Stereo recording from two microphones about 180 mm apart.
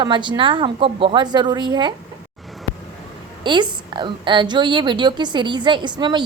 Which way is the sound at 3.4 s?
25° right (ahead or behind).